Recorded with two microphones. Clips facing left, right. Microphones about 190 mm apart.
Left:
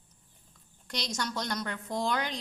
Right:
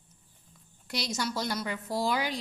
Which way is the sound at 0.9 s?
5° right (ahead or behind).